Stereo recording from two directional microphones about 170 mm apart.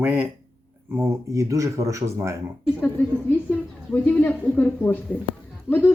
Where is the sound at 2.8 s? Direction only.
10° left (ahead or behind).